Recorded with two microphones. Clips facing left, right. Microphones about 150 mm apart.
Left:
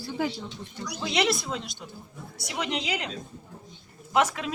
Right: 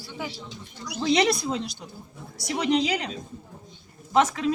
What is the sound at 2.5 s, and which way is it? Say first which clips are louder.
Speech: right 8 dB; 35° right (ahead or behind).